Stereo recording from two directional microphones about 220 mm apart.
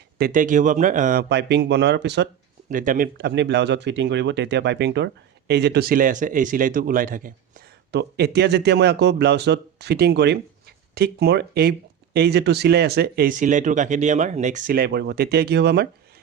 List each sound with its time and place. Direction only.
0.2 s a man's voice: 35° right (ahead or behind)
1.3 s speech: 50° right (ahead or behind)
2.6 s speech: 35° right (ahead or behind)